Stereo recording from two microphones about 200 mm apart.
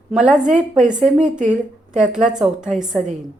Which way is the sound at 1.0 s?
40° right (ahead or behind).